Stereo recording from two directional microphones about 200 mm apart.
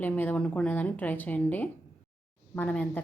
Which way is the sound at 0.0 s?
10° left (ahead or behind).